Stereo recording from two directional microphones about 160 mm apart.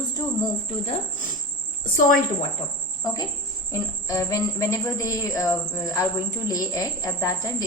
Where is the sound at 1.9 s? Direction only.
60° left (ahead or behind).